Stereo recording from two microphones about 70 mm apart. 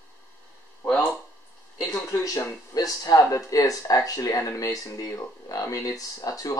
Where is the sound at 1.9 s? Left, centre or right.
Left.